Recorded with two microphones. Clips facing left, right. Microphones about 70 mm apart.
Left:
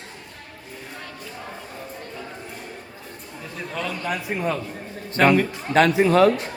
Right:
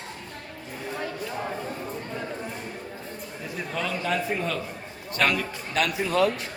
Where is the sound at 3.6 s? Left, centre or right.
Centre.